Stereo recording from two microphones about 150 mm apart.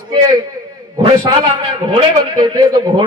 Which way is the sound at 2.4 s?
30° right (ahead or behind).